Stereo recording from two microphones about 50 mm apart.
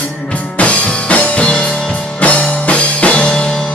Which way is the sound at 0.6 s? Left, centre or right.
Left.